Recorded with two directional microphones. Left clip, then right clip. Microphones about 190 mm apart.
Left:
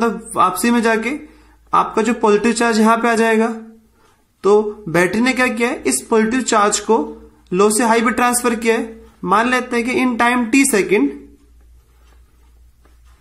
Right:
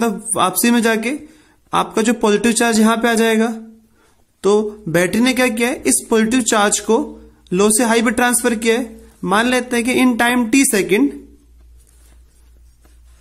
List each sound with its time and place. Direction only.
0.0 s speech: 35° right (ahead or behind)